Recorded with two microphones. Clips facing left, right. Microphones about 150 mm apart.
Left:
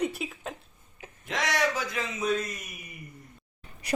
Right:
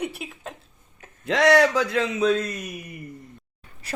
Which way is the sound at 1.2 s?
75° right (ahead or behind).